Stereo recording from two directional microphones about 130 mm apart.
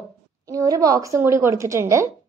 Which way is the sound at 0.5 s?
25° right (ahead or behind).